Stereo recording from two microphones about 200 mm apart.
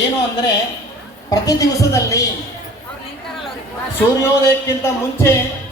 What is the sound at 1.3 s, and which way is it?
Speech, 15° left (ahead or behind).